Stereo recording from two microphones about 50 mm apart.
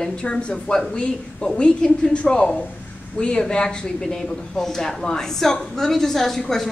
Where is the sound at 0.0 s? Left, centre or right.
Centre.